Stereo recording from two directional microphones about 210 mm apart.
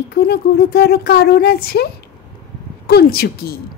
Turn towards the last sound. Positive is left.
turn(degrees=45)  # may be behind; listen again after turning